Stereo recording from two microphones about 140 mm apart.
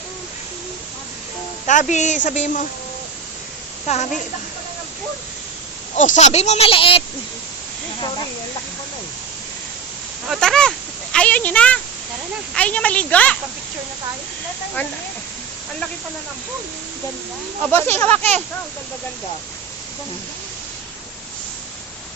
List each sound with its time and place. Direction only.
1.6 s a woman's voice: 60° left (ahead or behind)
3.9 s a woman's voice: 50° left (ahead or behind)
6.0 s a woman's voice: 60° left (ahead or behind); by 7.0 s 40° left (ahead or behind)
10.2 s a sound: 5° left (ahead or behind)
12.5 s speech: 10° left (ahead or behind)
14.8 s speech: 15° left (ahead or behind)
17.6 s speech: 15° left (ahead or behind)